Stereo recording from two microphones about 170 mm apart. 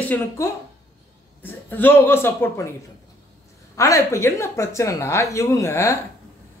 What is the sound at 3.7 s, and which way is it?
A woman's voice, 20° left (ahead or behind).